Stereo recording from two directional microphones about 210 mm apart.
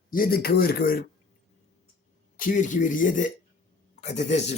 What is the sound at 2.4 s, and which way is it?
Speech, 40° left (ahead or behind).